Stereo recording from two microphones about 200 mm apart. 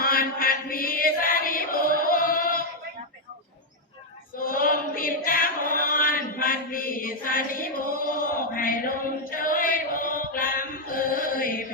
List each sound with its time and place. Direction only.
0.0 s chant: 45° left (ahead or behind)
4.4 s chant: 45° left (ahead or behind)